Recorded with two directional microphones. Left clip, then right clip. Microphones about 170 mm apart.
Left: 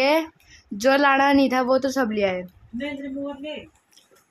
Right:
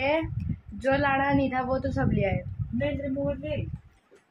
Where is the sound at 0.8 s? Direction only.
75° left (ahead or behind).